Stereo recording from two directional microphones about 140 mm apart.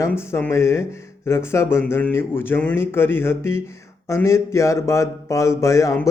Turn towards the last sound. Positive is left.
turn(degrees=20)  # may be behind; listen again after turning